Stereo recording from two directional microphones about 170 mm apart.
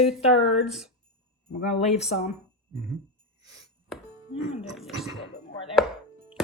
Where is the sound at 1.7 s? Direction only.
40° left (ahead or behind).